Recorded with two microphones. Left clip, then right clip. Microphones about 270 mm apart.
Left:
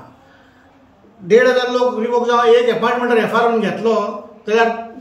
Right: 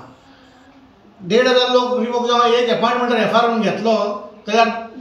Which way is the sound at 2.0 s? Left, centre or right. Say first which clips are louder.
Left 1 dB; centre.